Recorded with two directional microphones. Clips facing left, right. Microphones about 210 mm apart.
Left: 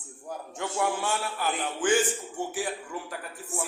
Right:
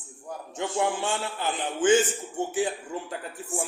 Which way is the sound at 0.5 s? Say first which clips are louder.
Right 2 dB; 25° right (ahead or behind).